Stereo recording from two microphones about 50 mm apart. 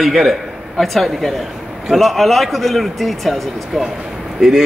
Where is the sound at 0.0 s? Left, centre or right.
Centre.